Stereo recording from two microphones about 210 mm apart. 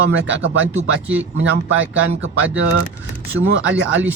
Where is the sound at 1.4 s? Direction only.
65° right (ahead or behind).